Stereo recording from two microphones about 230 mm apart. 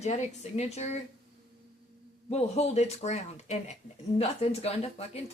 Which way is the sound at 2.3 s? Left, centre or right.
Left.